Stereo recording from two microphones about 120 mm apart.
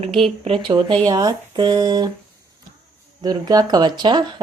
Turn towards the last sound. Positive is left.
turn(degrees=-40)  # may be behind; listen again after turning